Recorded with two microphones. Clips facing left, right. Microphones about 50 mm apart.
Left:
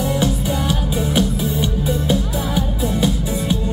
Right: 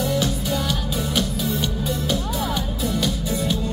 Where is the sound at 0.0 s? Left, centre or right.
Left.